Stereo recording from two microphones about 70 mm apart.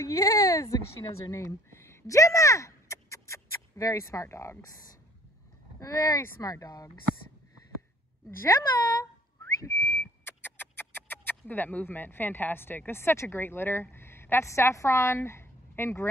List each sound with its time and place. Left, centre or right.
0.0 s speech: left
0.7 s speech: left
5.8 s speech: left
8.3 s speech: left
9.6 s whistling: left